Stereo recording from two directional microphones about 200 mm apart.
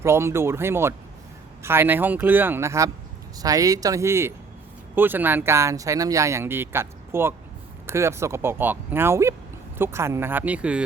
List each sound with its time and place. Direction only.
0.0 s speech: 15° right (ahead or behind)